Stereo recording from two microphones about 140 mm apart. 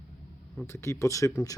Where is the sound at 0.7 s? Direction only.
20° left (ahead or behind).